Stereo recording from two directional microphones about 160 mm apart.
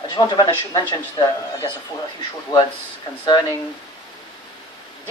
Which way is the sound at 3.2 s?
25° left (ahead or behind).